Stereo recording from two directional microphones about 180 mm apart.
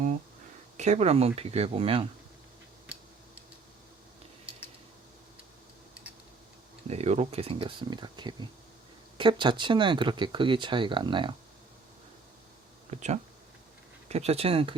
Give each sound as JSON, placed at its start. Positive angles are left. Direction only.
{"t": 0.8, "sound": "speech", "side_deg": -40}
{"t": 2.9, "sound": "tick-tock", "side_deg": -5}
{"t": 6.8, "sound": "speech", "side_deg": -35}
{"t": 12.9, "sound": "speech", "side_deg": -40}